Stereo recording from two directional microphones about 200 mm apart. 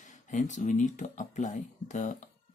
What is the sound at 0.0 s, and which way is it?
Speech, 35° left (ahead or behind).